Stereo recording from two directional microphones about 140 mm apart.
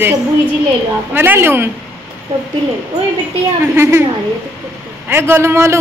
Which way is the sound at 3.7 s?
15° right (ahead or behind).